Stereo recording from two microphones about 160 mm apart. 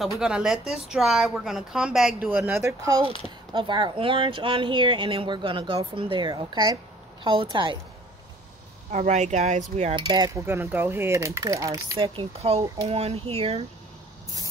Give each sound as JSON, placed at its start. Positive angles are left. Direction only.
{"t": 0.2, "sound": "a woman's voice", "side_deg": -5}
{"t": 3.5, "sound": "speech", "side_deg": -30}
{"t": 8.9, "sound": "speech", "side_deg": -45}
{"t": 9.9, "sound": "coin", "side_deg": -25}
{"t": 10.4, "sound": "speech", "side_deg": -15}
{"t": 12.0, "sound": "speech", "side_deg": -35}